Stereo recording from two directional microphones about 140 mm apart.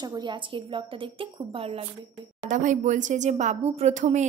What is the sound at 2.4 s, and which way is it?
Speech, 65° right (ahead or behind).